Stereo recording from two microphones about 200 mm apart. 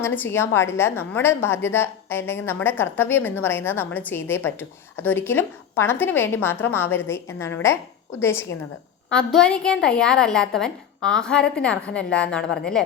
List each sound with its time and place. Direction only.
0.0 s a woman's voice: 10° left (ahead or behind)